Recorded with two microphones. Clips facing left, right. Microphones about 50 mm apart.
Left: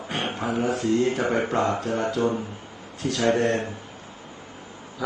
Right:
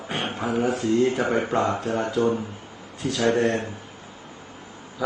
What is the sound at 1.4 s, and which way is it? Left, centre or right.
Speech, right.